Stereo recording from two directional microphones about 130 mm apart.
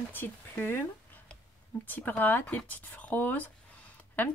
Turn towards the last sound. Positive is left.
turn(degrees=15)  # may be behind; listen again after turning